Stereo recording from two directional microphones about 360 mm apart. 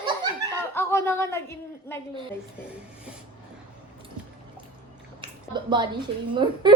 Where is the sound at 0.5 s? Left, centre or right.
Centre.